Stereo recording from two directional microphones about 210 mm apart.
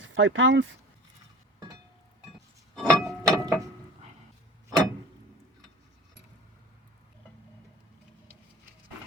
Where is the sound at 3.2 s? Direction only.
15° right (ahead or behind).